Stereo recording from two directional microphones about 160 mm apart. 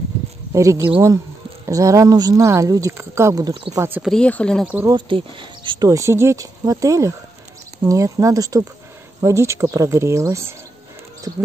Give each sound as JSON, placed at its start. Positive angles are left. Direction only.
{"t": 0.5, "sound": "speech", "side_deg": -20}
{"t": 4.0, "sound": "speech", "side_deg": 5}
{"t": 4.8, "sound": "speech", "side_deg": -30}